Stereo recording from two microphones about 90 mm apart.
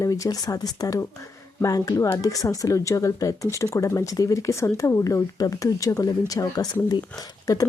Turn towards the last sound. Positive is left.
turn(degrees=40)  # may be behind; listen again after turning